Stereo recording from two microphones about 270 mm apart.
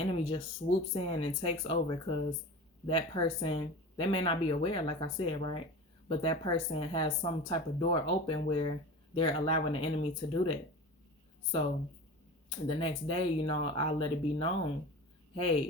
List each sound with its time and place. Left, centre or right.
0.0 s speech: centre
0.6 s speech: left
0.9 s speech: centre
12.6 s speech: centre